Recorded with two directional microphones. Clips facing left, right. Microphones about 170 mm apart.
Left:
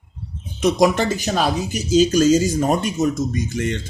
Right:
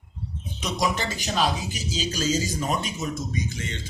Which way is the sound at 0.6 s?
55° left (ahead or behind).